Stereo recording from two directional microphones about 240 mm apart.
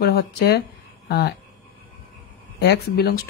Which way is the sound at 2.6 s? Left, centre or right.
Left.